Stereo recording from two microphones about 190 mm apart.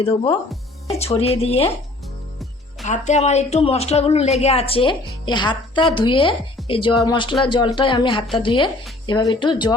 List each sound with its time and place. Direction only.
0.0 s a woman's voice: 25° left (ahead or behind)
2.8 s a woman's voice: 40° left (ahead or behind)